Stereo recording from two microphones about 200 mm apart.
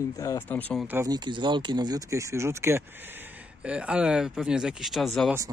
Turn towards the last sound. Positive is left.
turn(degrees=0)  # may be behind; listen again after turning